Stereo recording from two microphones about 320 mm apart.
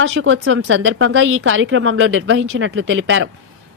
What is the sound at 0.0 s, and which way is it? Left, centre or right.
A woman's voice, right.